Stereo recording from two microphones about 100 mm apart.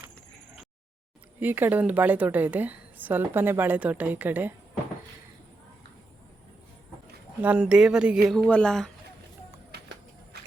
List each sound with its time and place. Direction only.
1.4 s a woman's voice: 20° right (ahead or behind)
7.4 s a woman's voice: 10° right (ahead or behind)
8.4 s speech: 10° left (ahead or behind)